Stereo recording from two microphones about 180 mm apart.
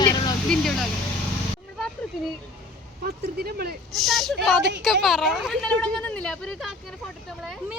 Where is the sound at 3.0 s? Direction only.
60° right (ahead or behind).